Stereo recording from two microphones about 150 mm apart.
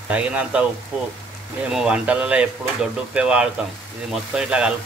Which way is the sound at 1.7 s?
5° right (ahead or behind).